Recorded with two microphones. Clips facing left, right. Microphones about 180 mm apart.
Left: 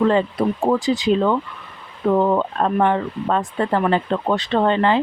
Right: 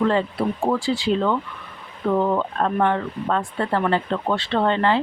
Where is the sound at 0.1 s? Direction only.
15° left (ahead or behind).